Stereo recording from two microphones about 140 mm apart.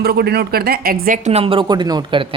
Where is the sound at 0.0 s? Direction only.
90° right.